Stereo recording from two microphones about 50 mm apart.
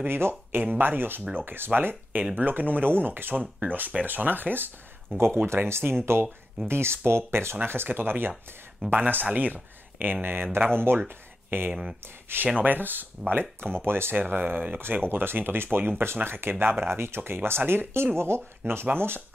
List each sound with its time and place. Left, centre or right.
0.0 s speech: right
11.1 s a sound: right
11.7 s speech: centre
12.3 s speech: right